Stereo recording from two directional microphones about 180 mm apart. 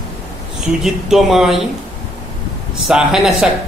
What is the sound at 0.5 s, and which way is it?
A man's voice, centre (ahead or behind).